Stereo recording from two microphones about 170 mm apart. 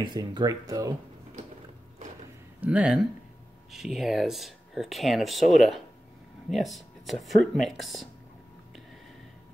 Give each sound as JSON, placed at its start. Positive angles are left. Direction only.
{"t": 0.0, "sound": "speech", "side_deg": -25}
{"t": 2.6, "sound": "speech", "side_deg": -5}